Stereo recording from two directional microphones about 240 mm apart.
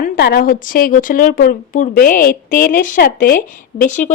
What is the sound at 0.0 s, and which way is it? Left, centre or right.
A woman's voice, left.